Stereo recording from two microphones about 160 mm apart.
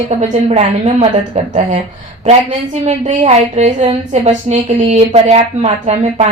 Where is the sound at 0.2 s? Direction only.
45° right (ahead or behind).